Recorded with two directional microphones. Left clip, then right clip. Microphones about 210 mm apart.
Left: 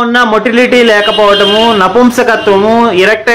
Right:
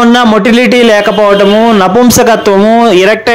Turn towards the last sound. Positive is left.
turn(degrees=-50)  # may be behind; listen again after turning